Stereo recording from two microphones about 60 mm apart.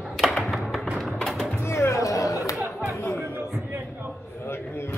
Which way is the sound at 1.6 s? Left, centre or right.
Left.